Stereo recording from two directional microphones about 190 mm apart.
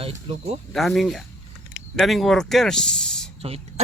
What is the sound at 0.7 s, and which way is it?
Speech, centre (ahead or behind).